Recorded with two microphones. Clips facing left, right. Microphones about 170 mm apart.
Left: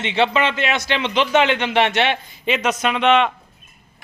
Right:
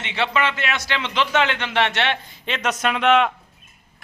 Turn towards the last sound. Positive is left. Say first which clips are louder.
# left 1 dB
turn(degrees=-5)  # may be behind; listen again after turning